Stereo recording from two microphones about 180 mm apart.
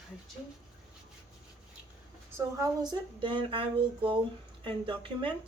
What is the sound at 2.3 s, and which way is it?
Speech, 20° right (ahead or behind).